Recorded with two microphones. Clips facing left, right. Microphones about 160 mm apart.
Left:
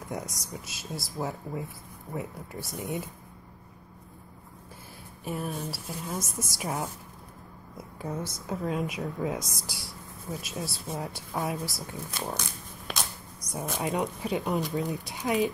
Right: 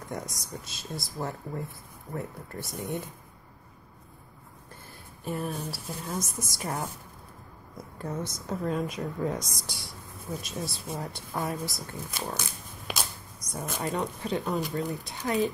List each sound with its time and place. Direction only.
0.1 s speech: 5° left (ahead or behind)
5.2 s speech: centre (ahead or behind)
12.1 s shuffling cards: 5° right (ahead or behind)
13.5 s speech: 5° left (ahead or behind)
14.5 s speech: centre (ahead or behind)
14.8 s speech: 10° left (ahead or behind)